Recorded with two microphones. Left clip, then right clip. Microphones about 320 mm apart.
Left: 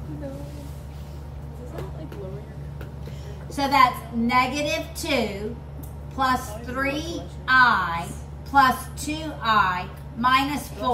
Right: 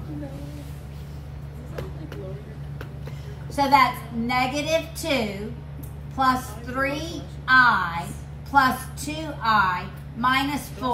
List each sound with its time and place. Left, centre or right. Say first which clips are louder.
3.5 s a woman's voice: even; centre